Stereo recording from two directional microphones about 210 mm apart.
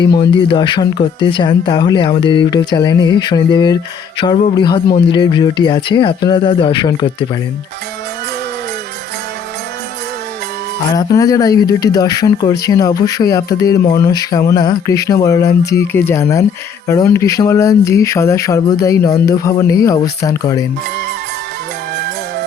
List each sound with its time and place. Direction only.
0.0 s speech: 20° left (ahead or behind)
10.9 s speech: 15° left (ahead or behind)
21.9 s music: 50° right (ahead or behind)